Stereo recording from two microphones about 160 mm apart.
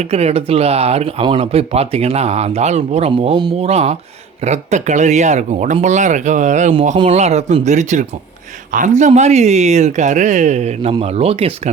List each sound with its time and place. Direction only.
0.0 s speech: 40° right (ahead or behind)